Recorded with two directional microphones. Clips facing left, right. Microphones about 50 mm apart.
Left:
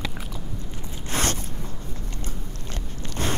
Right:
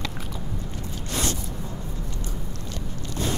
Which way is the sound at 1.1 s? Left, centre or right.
Left.